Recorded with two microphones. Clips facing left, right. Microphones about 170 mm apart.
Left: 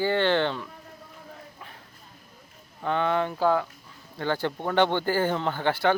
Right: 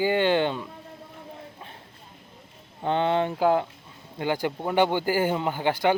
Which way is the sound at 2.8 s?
25° right (ahead or behind).